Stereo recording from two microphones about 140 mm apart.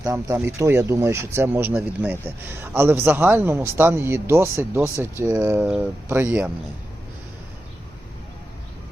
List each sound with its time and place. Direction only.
0.0 s speech: 20° right (ahead or behind)